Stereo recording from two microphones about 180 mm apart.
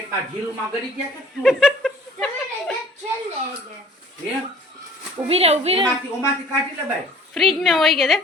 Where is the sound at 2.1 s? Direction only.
5° left (ahead or behind).